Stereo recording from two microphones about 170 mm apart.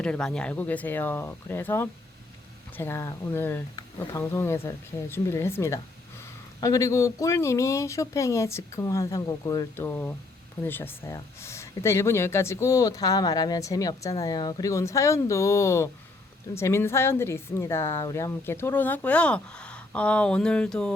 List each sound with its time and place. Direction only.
0.0 s speech: 5° left (ahead or behind)
3.8 s speech: 25° left (ahead or behind)
4.2 s speech: 15° left (ahead or behind)